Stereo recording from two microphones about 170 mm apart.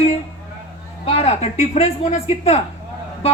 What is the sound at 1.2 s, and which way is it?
Speech, 40° left (ahead or behind).